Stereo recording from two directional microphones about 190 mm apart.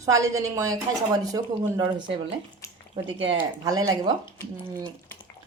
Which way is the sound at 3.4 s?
20° right (ahead or behind).